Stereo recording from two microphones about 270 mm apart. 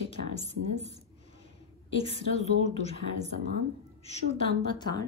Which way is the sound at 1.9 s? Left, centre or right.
Left.